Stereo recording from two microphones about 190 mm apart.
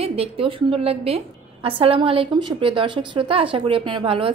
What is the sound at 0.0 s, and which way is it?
A woman's voice, 30° right (ahead or behind).